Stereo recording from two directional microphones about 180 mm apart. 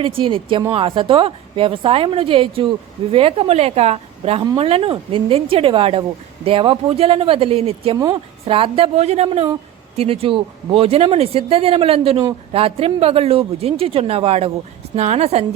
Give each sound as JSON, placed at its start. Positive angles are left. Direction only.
{"t": 0.0, "sound": "a woman's voice", "side_deg": -30}